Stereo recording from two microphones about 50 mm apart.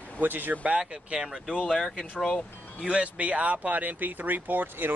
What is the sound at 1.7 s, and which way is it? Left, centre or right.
Speech, centre.